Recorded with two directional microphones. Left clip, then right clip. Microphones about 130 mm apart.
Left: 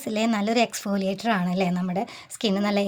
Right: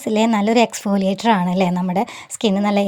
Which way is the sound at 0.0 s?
30° right (ahead or behind).